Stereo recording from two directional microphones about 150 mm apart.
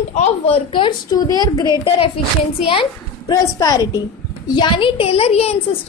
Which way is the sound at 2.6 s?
40° left (ahead or behind).